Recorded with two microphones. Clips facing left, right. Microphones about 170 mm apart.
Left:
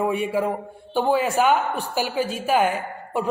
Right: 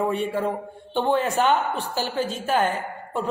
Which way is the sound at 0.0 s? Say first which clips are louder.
Left 1 dB; 10° left (ahead or behind).